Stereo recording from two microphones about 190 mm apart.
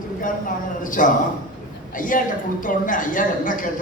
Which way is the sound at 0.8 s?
45° left (ahead or behind).